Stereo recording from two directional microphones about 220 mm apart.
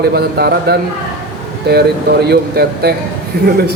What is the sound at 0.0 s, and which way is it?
A man's voice, 45° right (ahead or behind).